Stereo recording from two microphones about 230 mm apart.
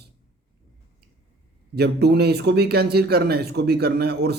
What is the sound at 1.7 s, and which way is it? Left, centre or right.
Speech, right.